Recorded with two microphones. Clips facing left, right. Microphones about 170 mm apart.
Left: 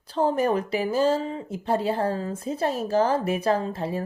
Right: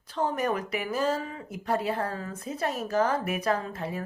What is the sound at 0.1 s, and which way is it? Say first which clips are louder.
Speech: left 6 dB; 30° left (ahead or behind).